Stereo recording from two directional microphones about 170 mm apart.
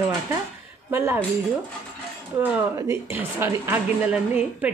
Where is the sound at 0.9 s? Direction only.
15° right (ahead or behind).